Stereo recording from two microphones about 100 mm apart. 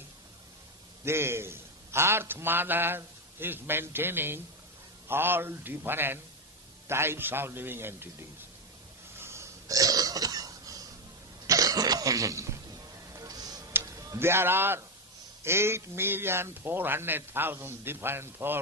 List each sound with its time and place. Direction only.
1.0 s a man's voice: 25° right (ahead or behind)
9.1 s burping: 25° right (ahead or behind)
11.4 s cough: 35° right (ahead or behind)
13.1 s tick: 40° right (ahead or behind)
13.8 s a sound: 35° right (ahead or behind)
14.2 s a man's voice: 25° right (ahead or behind)